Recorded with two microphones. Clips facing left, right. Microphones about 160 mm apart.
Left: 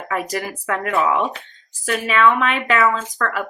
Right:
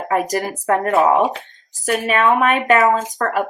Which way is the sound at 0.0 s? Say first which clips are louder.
Right 5 dB; 40° right (ahead or behind).